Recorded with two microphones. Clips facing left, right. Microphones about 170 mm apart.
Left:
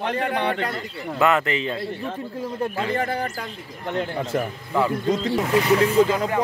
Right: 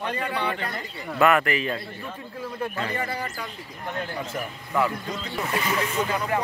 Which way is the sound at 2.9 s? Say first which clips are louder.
Left 5 dB; 50° left (ahead or behind).